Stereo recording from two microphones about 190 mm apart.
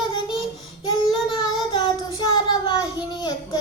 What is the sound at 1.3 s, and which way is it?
Child singing, 20° left (ahead or behind).